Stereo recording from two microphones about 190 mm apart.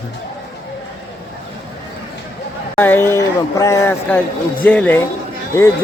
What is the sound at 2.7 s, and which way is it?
A man's voice, 10° left (ahead or behind).